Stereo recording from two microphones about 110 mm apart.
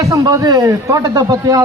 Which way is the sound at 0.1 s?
30° right (ahead or behind).